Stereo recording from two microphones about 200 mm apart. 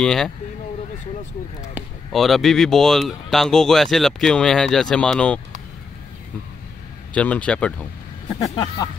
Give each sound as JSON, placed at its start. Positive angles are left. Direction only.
{"t": 0.0, "sound": "speech", "side_deg": 5}
{"t": 1.8, "sound": "speech", "side_deg": 0}
{"t": 7.2, "sound": "speech", "side_deg": 5}
{"t": 8.5, "sound": "speech", "side_deg": 20}